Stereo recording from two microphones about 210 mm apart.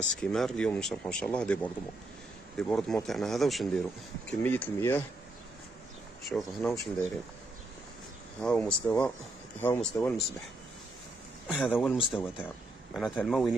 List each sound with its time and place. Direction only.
0.2 s speech: 5° left (ahead or behind)
6.2 s speech: centre (ahead or behind)
8.4 s speech: 5° left (ahead or behind)
11.4 s speech: centre (ahead or behind)